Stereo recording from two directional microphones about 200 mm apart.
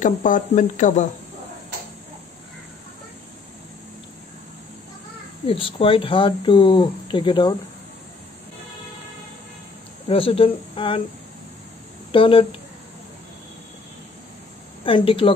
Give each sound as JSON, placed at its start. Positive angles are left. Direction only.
{"t": 0.0, "sound": "speech", "side_deg": 40}
{"t": 5.5, "sound": "speech", "side_deg": 25}
{"t": 10.0, "sound": "speech", "side_deg": 30}
{"t": 12.1, "sound": "speech", "side_deg": 25}
{"t": 14.9, "sound": "speech", "side_deg": 25}